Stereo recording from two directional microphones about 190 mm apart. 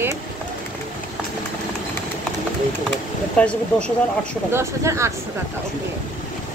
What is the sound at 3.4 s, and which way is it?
Speech, 5° left (ahead or behind).